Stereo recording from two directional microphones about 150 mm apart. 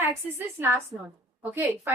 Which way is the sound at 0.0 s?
15° right (ahead or behind).